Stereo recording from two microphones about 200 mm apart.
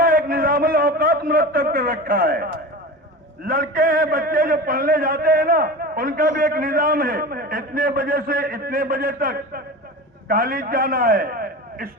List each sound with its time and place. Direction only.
0.0 s a man's voice: 45° right (ahead or behind)